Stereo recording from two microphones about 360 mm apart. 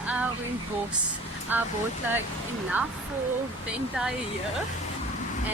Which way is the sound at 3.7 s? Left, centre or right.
Centre.